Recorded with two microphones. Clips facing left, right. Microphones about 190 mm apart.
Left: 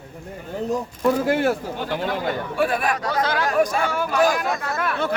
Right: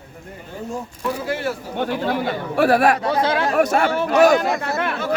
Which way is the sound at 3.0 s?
25° right (ahead or behind).